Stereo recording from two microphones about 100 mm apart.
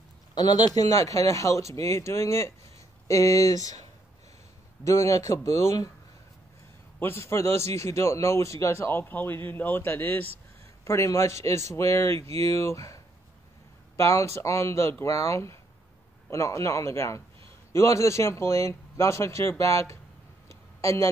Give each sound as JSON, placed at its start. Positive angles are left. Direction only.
{"t": 0.3, "sound": "a man's voice", "side_deg": 45}
{"t": 4.8, "sound": "speech", "side_deg": 35}
{"t": 7.0, "sound": "a man's voice", "side_deg": 25}
{"t": 7.5, "sound": "speech", "side_deg": -90}
{"t": 7.8, "sound": "a man's voice", "side_deg": 30}
{"t": 10.8, "sound": "a man's voice", "side_deg": 30}